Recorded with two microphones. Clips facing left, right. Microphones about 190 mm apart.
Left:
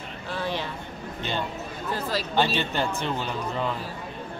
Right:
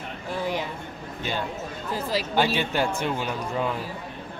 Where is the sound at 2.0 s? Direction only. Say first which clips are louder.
Right 1 dB; 10° right (ahead or behind).